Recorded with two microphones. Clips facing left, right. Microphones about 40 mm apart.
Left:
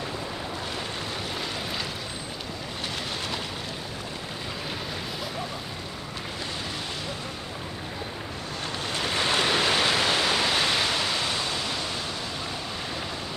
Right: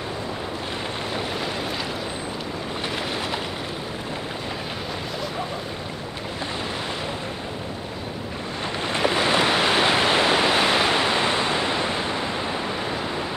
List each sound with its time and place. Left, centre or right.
8.8 s waves: right